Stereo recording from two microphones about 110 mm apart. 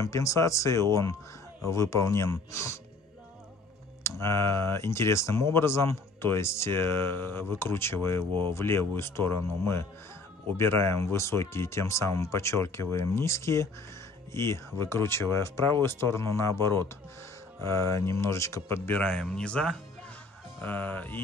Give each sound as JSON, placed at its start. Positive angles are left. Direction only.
{"t": 0.0, "sound": "speech", "side_deg": 30}
{"t": 4.2, "sound": "speech", "side_deg": 25}